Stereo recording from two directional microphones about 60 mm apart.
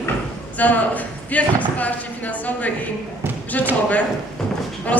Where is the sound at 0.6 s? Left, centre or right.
Left.